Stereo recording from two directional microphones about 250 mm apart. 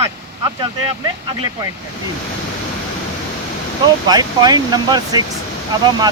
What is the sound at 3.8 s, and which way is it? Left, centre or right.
Speech, centre.